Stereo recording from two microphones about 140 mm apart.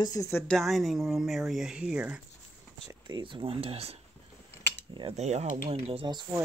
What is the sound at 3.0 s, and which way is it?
Speech, 35° right (ahead or behind).